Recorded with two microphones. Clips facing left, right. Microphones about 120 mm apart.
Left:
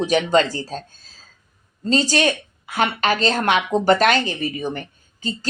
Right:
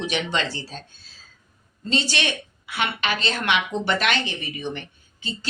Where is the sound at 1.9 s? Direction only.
40° left (ahead or behind).